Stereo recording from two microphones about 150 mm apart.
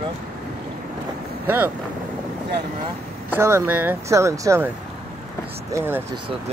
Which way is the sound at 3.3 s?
15° right (ahead or behind).